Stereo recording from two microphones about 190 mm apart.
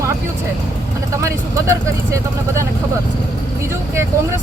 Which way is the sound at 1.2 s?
15° right (ahead or behind).